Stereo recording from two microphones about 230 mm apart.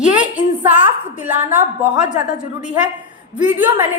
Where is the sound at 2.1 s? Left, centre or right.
Left.